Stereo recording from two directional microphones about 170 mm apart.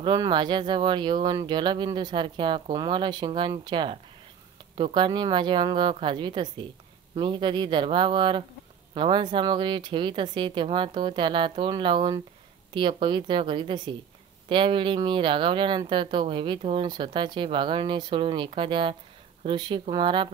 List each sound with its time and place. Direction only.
0.0 s speech: 25° right (ahead or behind)